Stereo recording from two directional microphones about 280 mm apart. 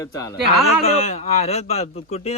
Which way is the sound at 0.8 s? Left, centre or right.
Left.